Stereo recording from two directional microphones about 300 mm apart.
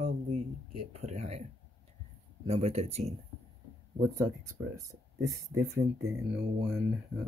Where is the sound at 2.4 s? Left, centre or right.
Right.